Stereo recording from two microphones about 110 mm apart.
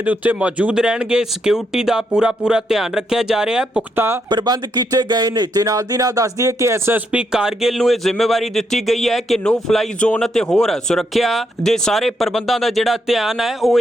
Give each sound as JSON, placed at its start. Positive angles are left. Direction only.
{"t": 0.0, "sound": "speech", "side_deg": -15}
{"t": 3.9, "sound": "speech", "side_deg": -20}
{"t": 4.3, "sound": "speech", "side_deg": -40}
{"t": 7.1, "sound": "speech", "side_deg": -5}